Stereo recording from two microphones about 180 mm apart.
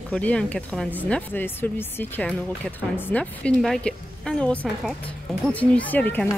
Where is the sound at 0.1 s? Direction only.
5° left (ahead or behind).